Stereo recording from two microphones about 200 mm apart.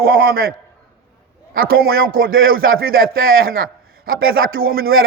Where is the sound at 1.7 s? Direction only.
50° right (ahead or behind).